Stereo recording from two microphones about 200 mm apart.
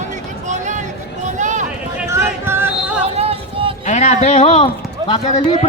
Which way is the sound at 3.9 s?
35° left (ahead or behind).